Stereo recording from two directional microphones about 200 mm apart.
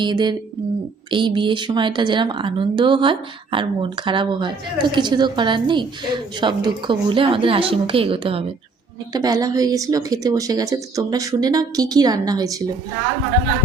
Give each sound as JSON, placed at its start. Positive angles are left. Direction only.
{"t": 0.0, "sound": "speech", "side_deg": -20}